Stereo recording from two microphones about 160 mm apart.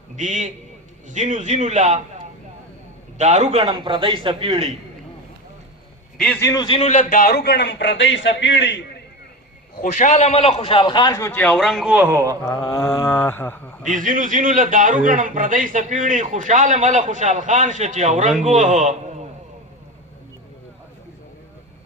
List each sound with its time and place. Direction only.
0.2 s a man's voice: 50° right (ahead or behind)
3.2 s a man's voice: 45° right (ahead or behind)
3.6 s a man's voice: 30° right (ahead or behind)
6.1 s a man's voice: 5° left (ahead or behind)
6.4 s a man's voice: 25° left (ahead or behind)
6.7 s a man's voice: 45° left (ahead or behind); by 8.8 s 90° left
9.8 s a man's voice: 50° left (ahead or behind); by 12.4 s 15° right (ahead or behind)
12.5 s mantra: 20° left (ahead or behind)
13.8 s a man's voice: 55° right (ahead or behind)